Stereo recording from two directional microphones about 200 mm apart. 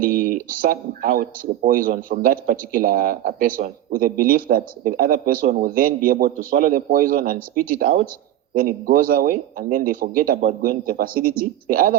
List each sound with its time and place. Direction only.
0.0 s speech: 45° right (ahead or behind)